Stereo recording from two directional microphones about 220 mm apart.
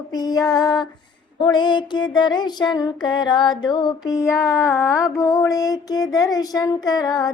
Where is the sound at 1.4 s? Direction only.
20° left (ahead or behind).